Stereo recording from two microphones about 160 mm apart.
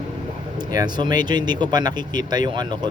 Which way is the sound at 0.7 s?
25° right (ahead or behind).